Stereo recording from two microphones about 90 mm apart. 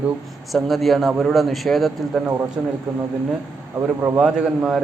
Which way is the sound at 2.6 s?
15° right (ahead or behind).